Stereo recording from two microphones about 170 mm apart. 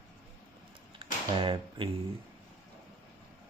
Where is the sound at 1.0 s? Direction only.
30° right (ahead or behind).